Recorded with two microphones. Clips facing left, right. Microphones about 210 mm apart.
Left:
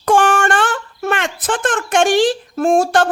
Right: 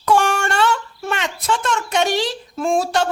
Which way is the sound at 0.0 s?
50° left (ahead or behind).